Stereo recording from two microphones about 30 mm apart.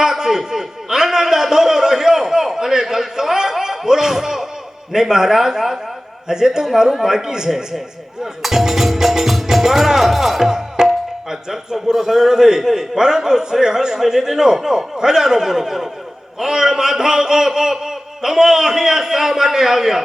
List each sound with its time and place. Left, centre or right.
0.0 s speech: centre
6.2 s a man's voice: right